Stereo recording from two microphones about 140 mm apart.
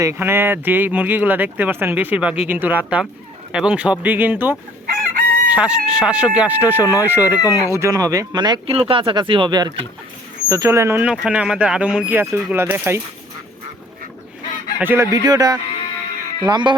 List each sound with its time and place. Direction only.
0.0 s speech: 20° right (ahead or behind)
4.9 s chicken: 90° right
5.5 s speech: 5° right (ahead or behind)
7.4 s speech: 25° left (ahead or behind)
7.8 s speech: 25° right (ahead or behind)
14.8 s speech: 15° right (ahead or behind)
15.1 s speech: 25° right (ahead or behind)